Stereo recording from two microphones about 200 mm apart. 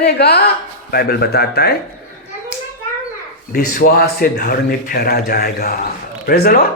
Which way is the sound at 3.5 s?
45° left (ahead or behind).